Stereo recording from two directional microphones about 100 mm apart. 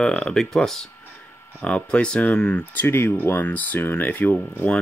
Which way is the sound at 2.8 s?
25° left (ahead or behind).